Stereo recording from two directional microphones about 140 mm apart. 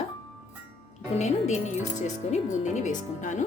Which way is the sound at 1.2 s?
55° left (ahead or behind).